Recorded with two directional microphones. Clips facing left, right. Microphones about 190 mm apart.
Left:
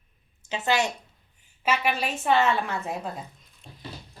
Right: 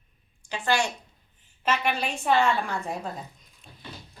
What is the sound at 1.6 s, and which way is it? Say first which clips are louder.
A woman's voice: left 1 dB; 5° left (ahead or behind).